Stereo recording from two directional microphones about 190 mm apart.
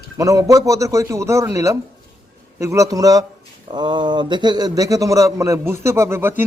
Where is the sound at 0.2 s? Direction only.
20° right (ahead or behind).